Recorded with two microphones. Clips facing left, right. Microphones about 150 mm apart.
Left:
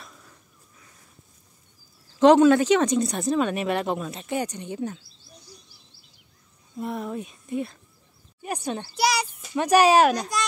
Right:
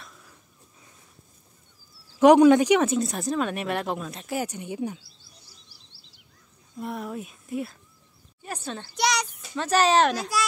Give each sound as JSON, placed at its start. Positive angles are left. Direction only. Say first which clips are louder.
{"t": 0.0, "sound": "a sound", "louder": "left 1 dB", "side_deg": 0}
{"t": 2.1, "sound": "speech", "louder": "right 1 dB", "side_deg": -15}
{"t": 5.7, "sound": "a sound", "louder": "even", "side_deg": -90}
{"t": 6.8, "sound": "speech", "louder": "left 2 dB", "side_deg": 0}
{"t": 8.4, "sound": "speech", "louder": "left 5 dB", "side_deg": 15}
{"t": 10.1, "sound": "speech", "louder": "even", "side_deg": -5}